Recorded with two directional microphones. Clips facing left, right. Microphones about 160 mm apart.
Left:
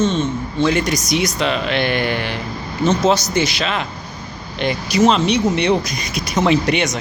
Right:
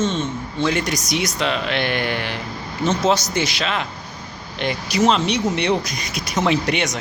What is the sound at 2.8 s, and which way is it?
Speech, 30° left (ahead or behind).